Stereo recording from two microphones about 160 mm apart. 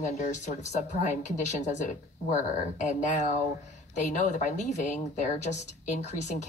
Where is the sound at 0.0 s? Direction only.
50° left (ahead or behind).